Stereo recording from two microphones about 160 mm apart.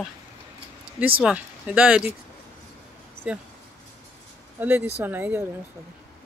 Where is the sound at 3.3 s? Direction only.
5° right (ahead or behind).